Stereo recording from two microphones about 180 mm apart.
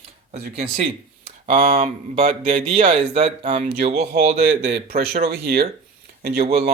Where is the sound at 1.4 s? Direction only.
35° right (ahead or behind).